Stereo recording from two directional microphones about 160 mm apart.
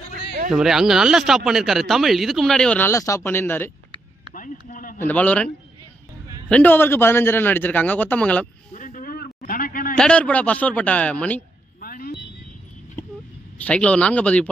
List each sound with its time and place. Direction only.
0.5 s speech: 5° right (ahead or behind)
2.9 s a man's voice: 20° left (ahead or behind)
4.3 s a sound: 55° left (ahead or behind)
4.9 s a man's voice: 10° left (ahead or behind)
6.5 s a man's voice: 10° left (ahead or behind)
8.7 s a sound: 55° left (ahead or behind)
9.9 s a man's voice: 5° left (ahead or behind)
11.8 s vehicle: 65° left (ahead or behind)
13.6 s a man's voice: 10° left (ahead or behind)